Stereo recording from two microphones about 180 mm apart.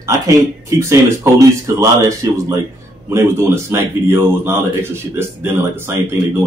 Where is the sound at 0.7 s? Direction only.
15° right (ahead or behind).